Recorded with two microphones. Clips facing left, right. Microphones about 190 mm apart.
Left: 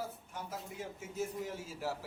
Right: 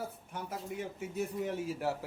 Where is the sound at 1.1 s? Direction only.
65° right (ahead or behind).